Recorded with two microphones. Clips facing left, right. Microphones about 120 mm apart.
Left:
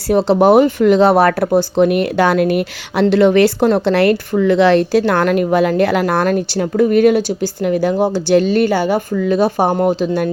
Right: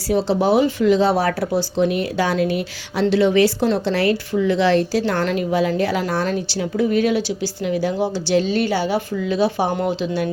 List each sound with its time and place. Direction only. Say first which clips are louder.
0.1 s speech: left 7 dB; 60° left (ahead or behind)